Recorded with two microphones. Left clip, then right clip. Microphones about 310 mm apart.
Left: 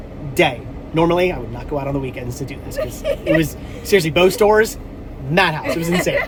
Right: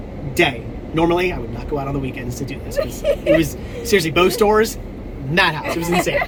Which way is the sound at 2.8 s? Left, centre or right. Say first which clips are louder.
Right 2 dB; centre.